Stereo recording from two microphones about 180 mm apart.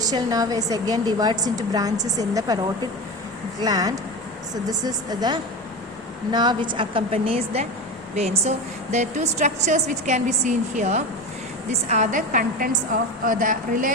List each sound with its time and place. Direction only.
0.1 s a woman's voice: 20° right (ahead or behind)
3.6 s a woman's voice: 20° right (ahead or behind); by 13.9 s 45° right (ahead or behind)